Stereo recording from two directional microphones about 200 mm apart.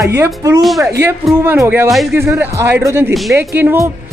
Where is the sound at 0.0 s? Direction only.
15° right (ahead or behind).